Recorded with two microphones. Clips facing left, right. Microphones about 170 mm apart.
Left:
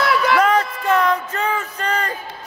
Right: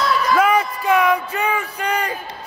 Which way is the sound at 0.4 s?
10° right (ahead or behind).